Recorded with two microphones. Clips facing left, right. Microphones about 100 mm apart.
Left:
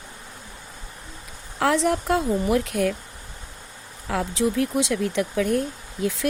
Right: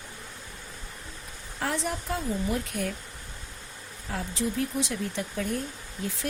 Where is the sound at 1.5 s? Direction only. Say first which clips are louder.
Left 10 dB; 90° left.